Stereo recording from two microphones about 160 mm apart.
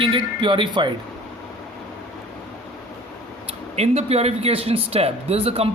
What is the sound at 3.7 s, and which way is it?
Speech, 40° right (ahead or behind).